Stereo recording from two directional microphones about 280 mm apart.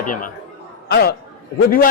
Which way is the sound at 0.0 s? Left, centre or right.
Left.